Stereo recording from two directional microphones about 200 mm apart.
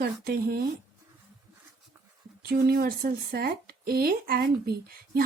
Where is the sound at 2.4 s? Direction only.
50° right (ahead or behind).